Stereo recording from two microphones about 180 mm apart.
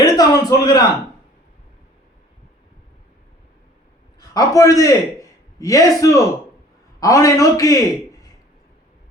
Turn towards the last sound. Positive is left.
turn(degrees=20)  # may be behind; listen again after turning